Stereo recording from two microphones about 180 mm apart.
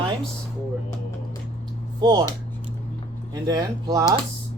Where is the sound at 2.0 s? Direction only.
20° right (ahead or behind).